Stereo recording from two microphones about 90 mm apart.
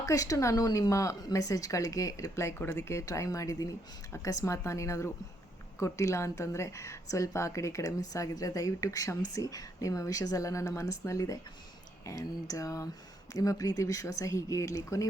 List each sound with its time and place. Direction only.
0.0 s a woman's voice: 40° left (ahead or behind)